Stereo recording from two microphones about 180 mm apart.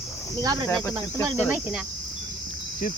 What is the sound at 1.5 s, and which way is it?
Speech, 5° right (ahead or behind).